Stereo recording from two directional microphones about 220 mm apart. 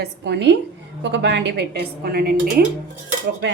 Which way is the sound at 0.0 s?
50° right (ahead or behind).